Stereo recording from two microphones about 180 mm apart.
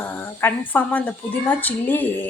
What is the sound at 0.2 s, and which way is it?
A woman's voice, 10° left (ahead or behind).